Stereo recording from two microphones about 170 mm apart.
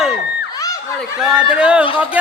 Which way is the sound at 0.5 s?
20° left (ahead or behind).